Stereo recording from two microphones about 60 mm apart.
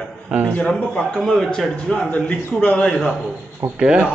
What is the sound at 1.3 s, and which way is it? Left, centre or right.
Speech, centre.